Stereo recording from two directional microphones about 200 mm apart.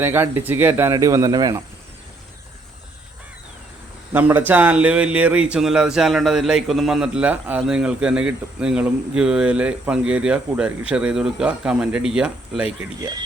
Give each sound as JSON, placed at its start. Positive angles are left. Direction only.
{"t": 0.0, "sound": "speech", "side_deg": -10}
{"t": 4.1, "sound": "speech", "side_deg": -10}
{"t": 13.0, "sound": "speech", "side_deg": -20}